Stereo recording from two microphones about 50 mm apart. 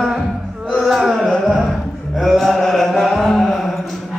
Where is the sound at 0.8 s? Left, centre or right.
Centre.